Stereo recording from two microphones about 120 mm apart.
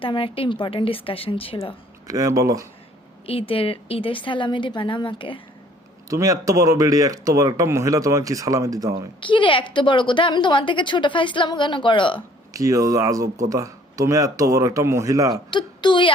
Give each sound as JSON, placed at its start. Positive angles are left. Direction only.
{"t": 0.0, "sound": "a woman's voice", "side_deg": 45}
{"t": 2.0, "sound": "speech", "side_deg": -30}
{"t": 3.2, "sound": "a woman's voice", "side_deg": 50}
{"t": 6.1, "sound": "speech", "side_deg": -25}
{"t": 9.2, "sound": "a woman's voice", "side_deg": 45}
{"t": 12.5, "sound": "speech", "side_deg": -25}
{"t": 15.5, "sound": "a woman's voice", "side_deg": 40}